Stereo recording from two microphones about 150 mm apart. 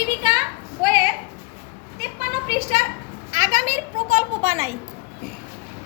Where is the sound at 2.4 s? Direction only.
45° right (ahead or behind).